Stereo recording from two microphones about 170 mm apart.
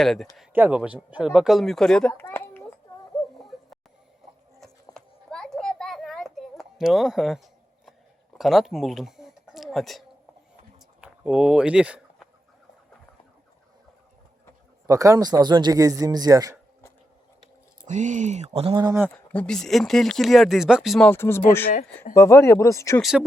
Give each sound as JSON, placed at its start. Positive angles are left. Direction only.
{"t": 0.0, "sound": "speech", "side_deg": 0}
{"t": 4.9, "sound": "a sound", "side_deg": 5}
{"t": 11.0, "sound": "a sound", "side_deg": -5}
{"t": 14.8, "sound": "a man's voice", "side_deg": -20}
{"t": 17.8, "sound": "speech", "side_deg": -45}
{"t": 19.1, "sound": "speech", "side_deg": 5}
{"t": 21.1, "sound": "speech", "side_deg": 15}
{"t": 23.0, "sound": "speech", "side_deg": 0}